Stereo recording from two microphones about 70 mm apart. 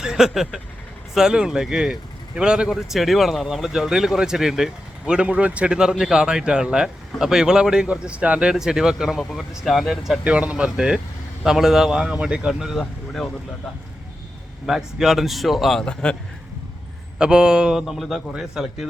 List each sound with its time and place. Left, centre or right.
0.0 s speech: centre
2.6 s speech: centre
10.2 s speech: centre
14.7 s speech: centre
15.8 s a man's voice: centre
17.2 s speech: centre